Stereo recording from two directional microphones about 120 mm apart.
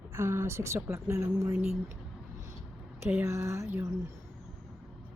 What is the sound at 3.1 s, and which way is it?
Speech, 20° right (ahead or behind).